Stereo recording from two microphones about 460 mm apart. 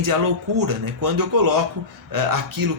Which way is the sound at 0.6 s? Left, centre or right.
Right.